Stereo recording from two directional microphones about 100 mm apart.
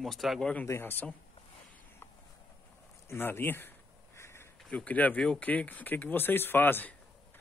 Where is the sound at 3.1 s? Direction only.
20° left (ahead or behind).